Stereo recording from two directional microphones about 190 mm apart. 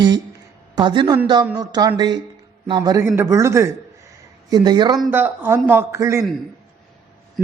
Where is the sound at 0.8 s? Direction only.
25° right (ahead or behind).